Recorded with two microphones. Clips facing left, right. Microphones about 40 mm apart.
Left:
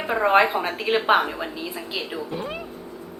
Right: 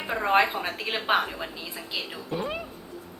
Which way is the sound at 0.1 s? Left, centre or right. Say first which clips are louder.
Left 4 dB; centre.